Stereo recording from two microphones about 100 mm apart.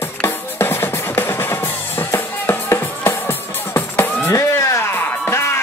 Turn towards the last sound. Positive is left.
turn(degrees=25)  # may be behind; listen again after turning